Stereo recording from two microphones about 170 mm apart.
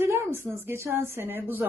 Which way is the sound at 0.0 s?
15° right (ahead or behind).